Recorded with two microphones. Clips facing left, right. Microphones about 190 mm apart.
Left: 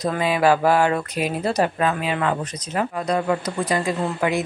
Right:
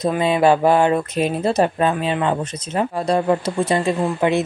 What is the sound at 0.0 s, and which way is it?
Speech, 25° right (ahead or behind).